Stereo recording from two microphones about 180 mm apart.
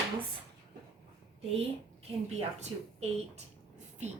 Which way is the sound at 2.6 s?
40° right (ahead or behind).